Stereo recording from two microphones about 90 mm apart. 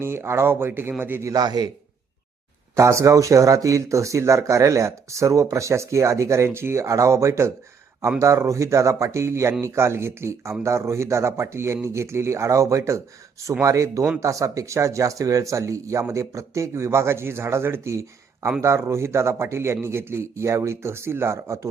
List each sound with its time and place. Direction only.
0.0 s a man's voice: 25° right (ahead or behind)
1.2 s a man's voice: 45° right (ahead or behind)
2.7 s a man's voice: 35° right (ahead or behind)